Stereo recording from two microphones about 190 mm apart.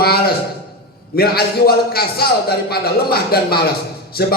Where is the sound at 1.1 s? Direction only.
55° left (ahead or behind).